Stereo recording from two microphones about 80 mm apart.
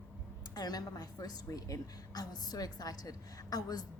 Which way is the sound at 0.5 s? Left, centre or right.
Left.